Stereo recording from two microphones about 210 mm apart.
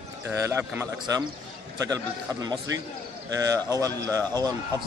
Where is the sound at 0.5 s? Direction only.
10° right (ahead or behind).